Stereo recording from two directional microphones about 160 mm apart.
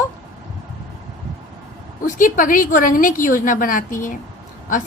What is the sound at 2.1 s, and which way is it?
A woman's voice, 55° left (ahead or behind).